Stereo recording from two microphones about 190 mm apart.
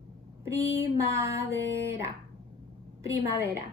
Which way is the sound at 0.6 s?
15° right (ahead or behind).